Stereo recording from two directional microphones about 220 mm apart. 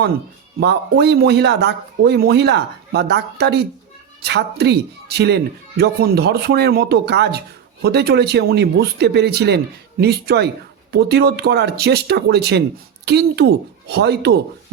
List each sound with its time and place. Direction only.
0.6 s a man's voice: 50° right (ahead or behind)